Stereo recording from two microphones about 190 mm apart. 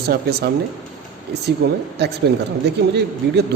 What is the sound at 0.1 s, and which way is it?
Speech, 55° right (ahead or behind).